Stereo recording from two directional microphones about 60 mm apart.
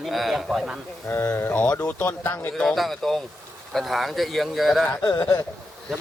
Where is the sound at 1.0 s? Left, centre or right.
Left.